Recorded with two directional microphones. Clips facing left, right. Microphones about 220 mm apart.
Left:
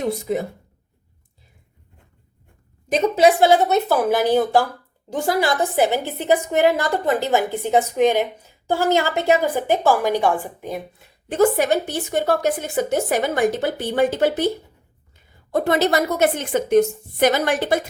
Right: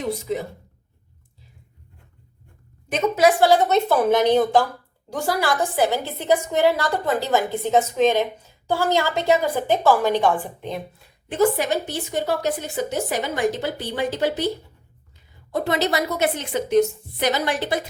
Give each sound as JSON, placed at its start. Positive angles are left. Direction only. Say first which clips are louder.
{"t": 2.9, "sound": "a woman's voice", "louder": "left 3 dB", "side_deg": 30}
{"t": 5.0, "sound": "a woman's voice", "louder": "left 3 dB", "side_deg": 20}
{"t": 11.3, "sound": "a woman's voice", "louder": "left 3 dB", "side_deg": 50}
{"t": 15.5, "sound": "a woman's voice", "louder": "left 4 dB", "side_deg": 50}